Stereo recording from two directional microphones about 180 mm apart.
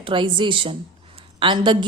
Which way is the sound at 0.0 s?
25° right (ahead or behind).